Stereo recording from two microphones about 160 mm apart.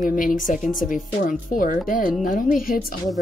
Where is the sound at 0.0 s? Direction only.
60° left (ahead or behind).